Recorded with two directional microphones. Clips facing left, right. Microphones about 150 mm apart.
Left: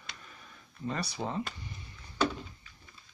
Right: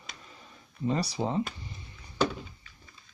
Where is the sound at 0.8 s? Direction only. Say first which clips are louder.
Right 6 dB; 30° right (ahead or behind).